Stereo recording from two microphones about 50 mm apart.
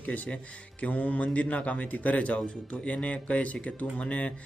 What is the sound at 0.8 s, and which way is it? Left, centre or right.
A man's voice, left.